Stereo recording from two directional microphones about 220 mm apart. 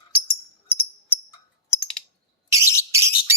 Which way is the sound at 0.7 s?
10° left (ahead or behind).